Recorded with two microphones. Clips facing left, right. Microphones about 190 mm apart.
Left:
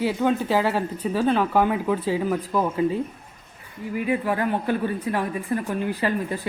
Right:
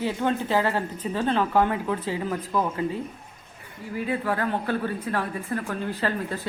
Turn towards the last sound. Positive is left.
turn(degrees=15)  # may be behind; listen again after turning